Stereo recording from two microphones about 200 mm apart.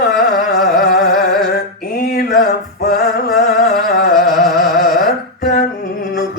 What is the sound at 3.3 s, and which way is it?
Music, centre (ahead or behind).